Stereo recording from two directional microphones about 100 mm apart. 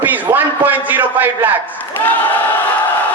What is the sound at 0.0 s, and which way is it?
A man's voice, 15° right (ahead or behind).